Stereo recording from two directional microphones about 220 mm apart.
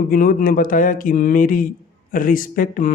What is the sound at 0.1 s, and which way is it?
Speech, 40° left (ahead or behind).